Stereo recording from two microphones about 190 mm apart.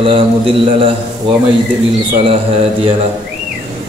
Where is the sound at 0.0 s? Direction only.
30° right (ahead or behind).